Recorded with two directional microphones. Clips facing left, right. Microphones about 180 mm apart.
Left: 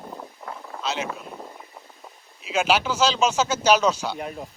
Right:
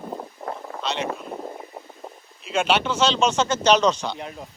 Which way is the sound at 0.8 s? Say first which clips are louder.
Right 1 dB; 5° left (ahead or behind).